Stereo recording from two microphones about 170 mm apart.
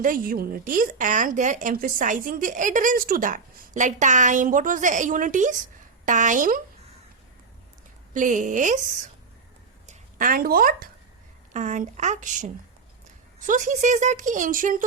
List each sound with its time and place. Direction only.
0.0 s a woman's voice: 55° right (ahead or behind)
8.1 s a woman's voice: 50° right (ahead or behind)
9.8 s speech: 50° right (ahead or behind)
11.5 s a woman's voice: 45° right (ahead or behind)
13.5 s a woman's voice: 45° right (ahead or behind)